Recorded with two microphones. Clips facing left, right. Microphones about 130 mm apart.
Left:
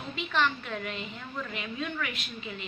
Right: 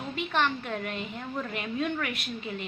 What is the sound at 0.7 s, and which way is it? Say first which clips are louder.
A woman's voice: right 3 dB; 50° right (ahead or behind).